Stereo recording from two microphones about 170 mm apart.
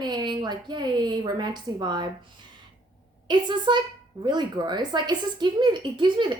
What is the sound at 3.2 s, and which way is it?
Speech, 25° right (ahead or behind).